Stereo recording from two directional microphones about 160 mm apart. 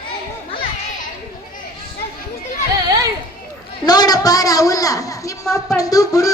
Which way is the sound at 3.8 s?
25° left (ahead or behind).